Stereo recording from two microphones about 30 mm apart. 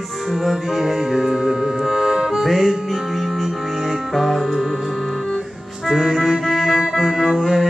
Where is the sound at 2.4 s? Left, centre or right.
Centre.